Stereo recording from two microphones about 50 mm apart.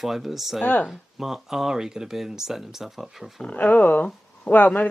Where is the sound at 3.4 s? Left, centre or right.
Left.